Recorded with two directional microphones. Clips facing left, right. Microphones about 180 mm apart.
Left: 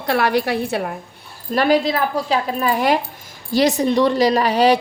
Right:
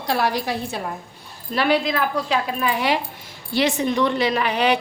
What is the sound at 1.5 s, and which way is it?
A woman's voice, 40° left (ahead or behind).